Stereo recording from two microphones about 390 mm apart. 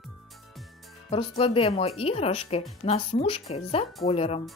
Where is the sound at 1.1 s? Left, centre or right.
Centre.